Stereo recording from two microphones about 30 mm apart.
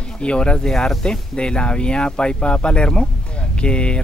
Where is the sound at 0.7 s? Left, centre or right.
Centre.